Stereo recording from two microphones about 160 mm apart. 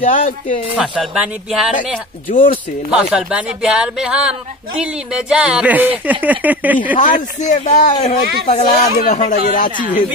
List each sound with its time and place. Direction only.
0.0 s speech: 55° left (ahead or behind)
0.7 s speech: 5° right (ahead or behind)
2.9 s speech: 5° right (ahead or behind)
6.8 s speech: 55° left (ahead or behind)